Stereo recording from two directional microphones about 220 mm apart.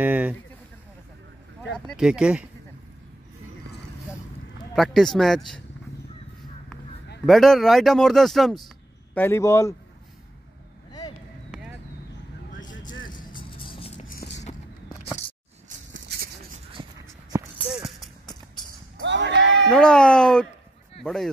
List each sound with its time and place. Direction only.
0.0 s speech: 5° right (ahead or behind)
1.6 s speech: centre (ahead or behind)
4.7 s speech: centre (ahead or behind)
7.2 s speech: centre (ahead or behind)
10.9 s vehicle: 20° left (ahead or behind)
13.3 s music: 20° left (ahead or behind)
16.8 s a sound: 20° right (ahead or behind)
17.6 s music: centre (ahead or behind)
19.0 s a sound: 55° right (ahead or behind)
19.7 s speech: 5° left (ahead or behind)